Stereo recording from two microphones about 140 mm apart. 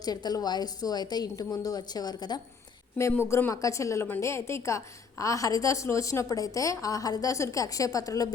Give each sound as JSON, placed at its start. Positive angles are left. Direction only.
{"t": 0.0, "sound": "a woman's voice", "side_deg": 30}
{"t": 3.0, "sound": "a woman's voice", "side_deg": 20}